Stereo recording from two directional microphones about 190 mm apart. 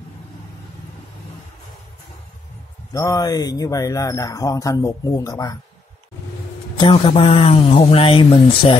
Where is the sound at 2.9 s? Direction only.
20° left (ahead or behind).